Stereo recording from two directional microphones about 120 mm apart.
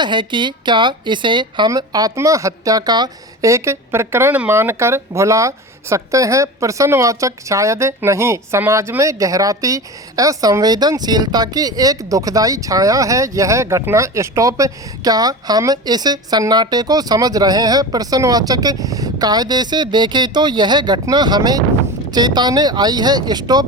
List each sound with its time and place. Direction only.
0.0 s speech: 40° right (ahead or behind)